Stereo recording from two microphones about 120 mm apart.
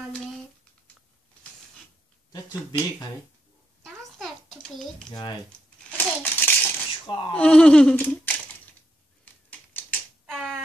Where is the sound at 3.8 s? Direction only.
5° left (ahead or behind).